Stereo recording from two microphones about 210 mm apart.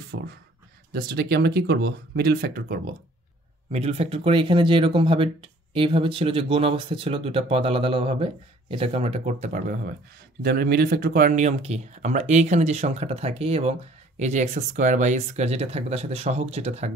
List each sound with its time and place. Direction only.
0.1 s speech: 55° right (ahead or behind)
0.9 s speech: 45° right (ahead or behind)
3.7 s speech: 30° right (ahead or behind)
10.4 s speech: 45° right (ahead or behind); by 16.9 s 30° right (ahead or behind)